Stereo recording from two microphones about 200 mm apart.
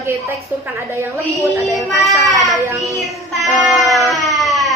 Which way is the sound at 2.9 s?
Centre (ahead or behind).